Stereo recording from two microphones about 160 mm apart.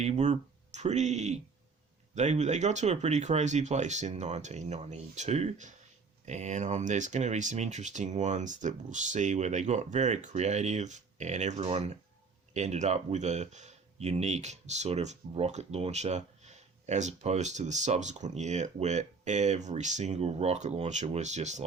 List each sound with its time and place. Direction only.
0.0 s speech: 45° right (ahead or behind)